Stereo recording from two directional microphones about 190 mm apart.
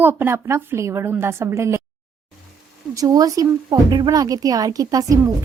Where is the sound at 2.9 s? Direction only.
20° right (ahead or behind).